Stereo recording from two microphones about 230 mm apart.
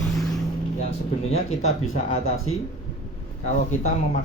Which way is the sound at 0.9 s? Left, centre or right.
Left.